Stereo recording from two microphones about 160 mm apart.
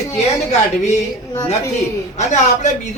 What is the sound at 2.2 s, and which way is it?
Speech, 45° left (ahead or behind).